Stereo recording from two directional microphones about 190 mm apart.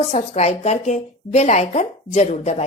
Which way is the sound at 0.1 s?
35° left (ahead or behind).